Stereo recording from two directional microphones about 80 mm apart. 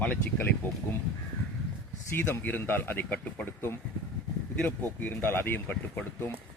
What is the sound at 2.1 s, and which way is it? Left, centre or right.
Speech, left.